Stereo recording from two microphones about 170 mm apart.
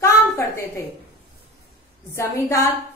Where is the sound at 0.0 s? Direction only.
15° left (ahead or behind).